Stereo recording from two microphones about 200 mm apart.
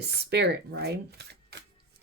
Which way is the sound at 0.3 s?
55° right (ahead or behind).